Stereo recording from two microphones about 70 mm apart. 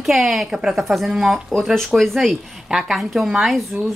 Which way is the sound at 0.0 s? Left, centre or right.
Centre.